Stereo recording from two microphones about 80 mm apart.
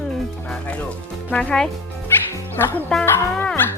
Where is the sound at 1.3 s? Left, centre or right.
Centre.